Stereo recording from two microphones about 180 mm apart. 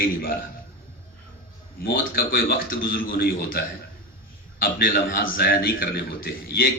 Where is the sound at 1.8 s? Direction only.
55° left (ahead or behind).